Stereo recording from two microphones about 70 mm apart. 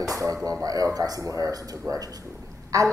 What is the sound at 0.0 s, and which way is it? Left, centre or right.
Music, right.